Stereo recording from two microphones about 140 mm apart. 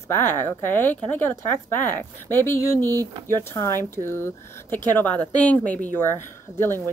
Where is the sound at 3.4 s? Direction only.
20° left (ahead or behind).